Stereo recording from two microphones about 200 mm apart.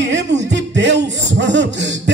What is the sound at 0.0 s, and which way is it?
Music, 60° right (ahead or behind).